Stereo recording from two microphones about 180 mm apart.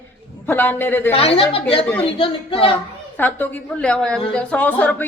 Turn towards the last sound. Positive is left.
turn(degrees=10)  # may be behind; listen again after turning